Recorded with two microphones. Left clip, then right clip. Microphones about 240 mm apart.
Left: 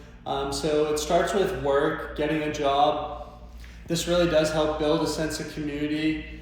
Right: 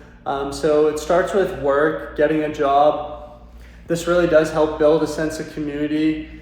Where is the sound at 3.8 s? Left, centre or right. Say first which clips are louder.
Right 6 dB; centre.